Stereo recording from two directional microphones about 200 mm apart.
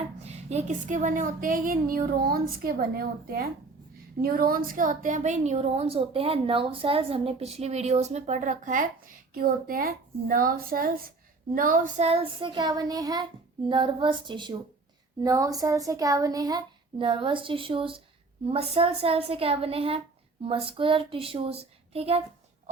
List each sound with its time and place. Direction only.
0.3 s a woman's voice: 35° right (ahead or behind)
4.2 s a woman's voice: 45° right (ahead or behind); by 22.2 s 30° right (ahead or behind)